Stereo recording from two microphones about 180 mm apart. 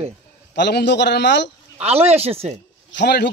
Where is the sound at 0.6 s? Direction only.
65° left (ahead or behind).